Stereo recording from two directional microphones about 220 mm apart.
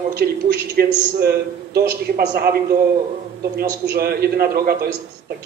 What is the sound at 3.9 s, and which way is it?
Speech, 45° right (ahead or behind).